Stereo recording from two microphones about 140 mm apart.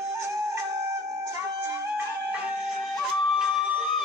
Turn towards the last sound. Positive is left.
turn(degrees=0)  # may be behind; listen again after turning